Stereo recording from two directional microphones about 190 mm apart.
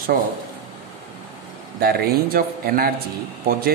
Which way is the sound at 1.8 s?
55° right (ahead or behind).